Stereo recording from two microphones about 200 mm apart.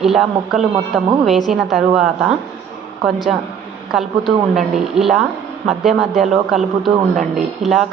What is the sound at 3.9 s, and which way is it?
A woman's voice, centre (ahead or behind).